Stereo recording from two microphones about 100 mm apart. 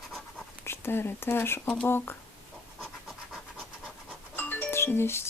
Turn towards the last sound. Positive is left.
turn(degrees=25)  # may be behind; listen again after turning